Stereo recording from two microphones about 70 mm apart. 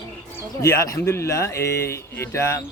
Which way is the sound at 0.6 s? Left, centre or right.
Left.